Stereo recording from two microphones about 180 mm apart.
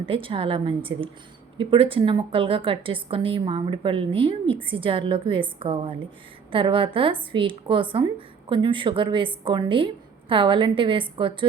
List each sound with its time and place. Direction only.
0.0 s a woman's voice: 30° right (ahead or behind)